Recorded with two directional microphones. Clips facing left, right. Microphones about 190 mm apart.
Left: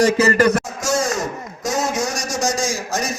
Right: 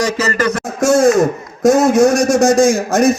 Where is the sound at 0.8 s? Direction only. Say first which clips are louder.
Right 11 dB; 55° right (ahead or behind).